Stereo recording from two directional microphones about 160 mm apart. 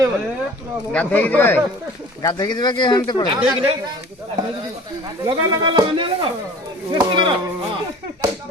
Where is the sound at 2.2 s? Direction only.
25° left (ahead or behind).